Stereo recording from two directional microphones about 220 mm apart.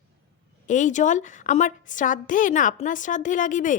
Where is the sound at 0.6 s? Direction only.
35° left (ahead or behind).